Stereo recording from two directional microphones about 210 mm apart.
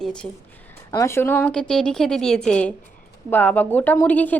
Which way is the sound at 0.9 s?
15° left (ahead or behind).